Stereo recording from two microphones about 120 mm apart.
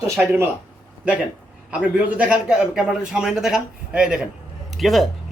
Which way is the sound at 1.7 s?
10° right (ahead or behind).